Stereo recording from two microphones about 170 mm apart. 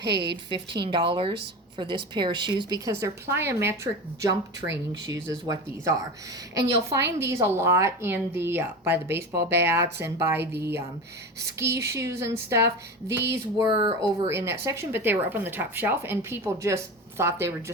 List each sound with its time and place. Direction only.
0.0 s a woman's voice: 75° right (ahead or behind)
0.5 s a woman's voice: 30° right (ahead or behind)
4.3 s a woman's voice: 90° right
4.9 s a woman's voice: 20° right (ahead or behind)
12.6 s speech: 80° right
13.7 s a woman's voice: 30° right (ahead or behind)
14.3 s speech: 15° right (ahead or behind)